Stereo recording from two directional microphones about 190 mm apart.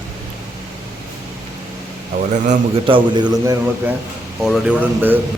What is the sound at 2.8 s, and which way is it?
A man's voice, 25° right (ahead or behind).